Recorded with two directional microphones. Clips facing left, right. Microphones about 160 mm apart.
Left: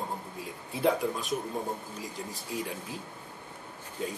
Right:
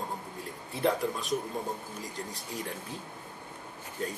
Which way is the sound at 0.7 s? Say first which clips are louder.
Left 1 dB; 5° left (ahead or behind).